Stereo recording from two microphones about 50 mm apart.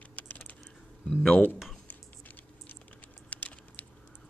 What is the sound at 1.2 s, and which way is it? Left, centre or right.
Speech, centre.